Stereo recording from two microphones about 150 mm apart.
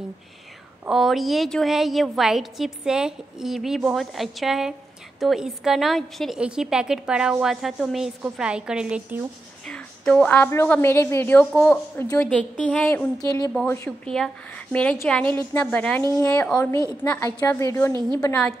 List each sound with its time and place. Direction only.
0.8 s a woman's voice: centre (ahead or behind)
9.7 s a woman's voice: 5° left (ahead or behind)
13.2 s a woman's voice: 25° left (ahead or behind)
13.7 s a woman's voice: 5° left (ahead or behind)
16.0 s a woman's voice: 20° left (ahead or behind)